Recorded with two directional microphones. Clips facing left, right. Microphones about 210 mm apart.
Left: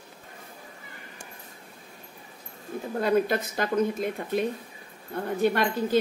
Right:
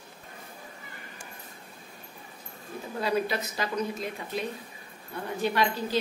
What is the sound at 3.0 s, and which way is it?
Speech, 50° left (ahead or behind).